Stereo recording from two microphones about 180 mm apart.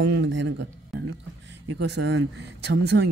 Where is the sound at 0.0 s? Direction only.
90° right.